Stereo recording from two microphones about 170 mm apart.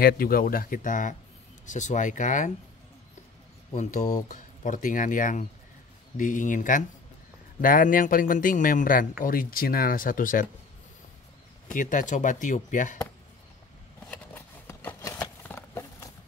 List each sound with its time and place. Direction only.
0.0 s speech: 60° left (ahead or behind)
3.7 s speech: 45° left (ahead or behind)
11.6 s speech: 50° left (ahead or behind)
14.1 s a sound: 10° left (ahead or behind)